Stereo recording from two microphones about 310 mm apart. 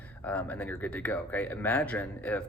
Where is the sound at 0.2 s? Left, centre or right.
Centre.